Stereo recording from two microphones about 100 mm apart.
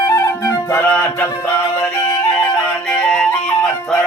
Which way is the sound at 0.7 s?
20° left (ahead or behind).